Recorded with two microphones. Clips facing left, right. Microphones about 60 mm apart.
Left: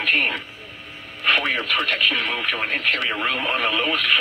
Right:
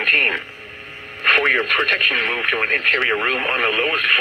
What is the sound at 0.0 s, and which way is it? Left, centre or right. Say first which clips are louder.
Speech: right 3 dB; right.